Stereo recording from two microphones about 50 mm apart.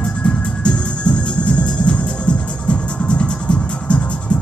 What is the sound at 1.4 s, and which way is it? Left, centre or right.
Music, left.